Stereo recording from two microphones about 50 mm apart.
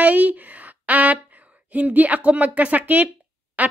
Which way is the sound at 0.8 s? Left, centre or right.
Right.